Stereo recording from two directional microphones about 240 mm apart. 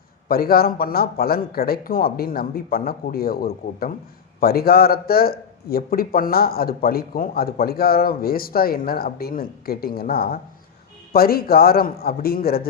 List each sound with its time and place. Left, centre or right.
0.3 s a man's voice: left